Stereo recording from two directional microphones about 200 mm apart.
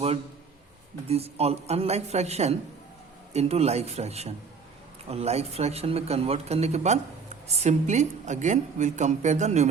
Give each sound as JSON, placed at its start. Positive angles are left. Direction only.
{"t": 1.0, "sound": "a woman's voice", "side_deg": -30}